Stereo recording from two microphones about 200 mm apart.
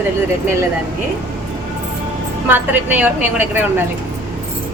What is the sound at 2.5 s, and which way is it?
A woman's voice, 10° right (ahead or behind).